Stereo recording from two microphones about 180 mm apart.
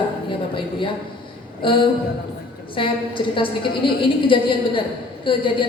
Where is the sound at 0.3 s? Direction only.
30° left (ahead or behind).